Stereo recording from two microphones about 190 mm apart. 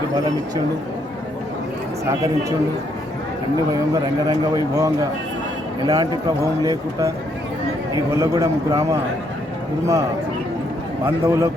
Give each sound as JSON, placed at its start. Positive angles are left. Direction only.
{"t": 4.3, "sound": "a man's voice", "side_deg": -20}